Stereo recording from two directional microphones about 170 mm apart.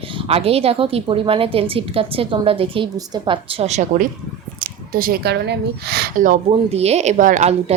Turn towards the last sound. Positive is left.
turn(degrees=-40)  # may be behind; listen again after turning